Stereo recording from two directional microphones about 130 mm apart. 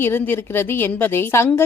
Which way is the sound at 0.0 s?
15° left (ahead or behind).